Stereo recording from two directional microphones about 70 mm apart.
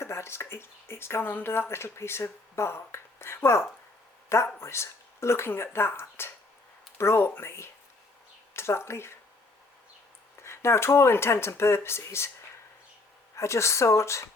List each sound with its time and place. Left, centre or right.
0.0 s speech: left
10.4 s speech: left
13.3 s speech: left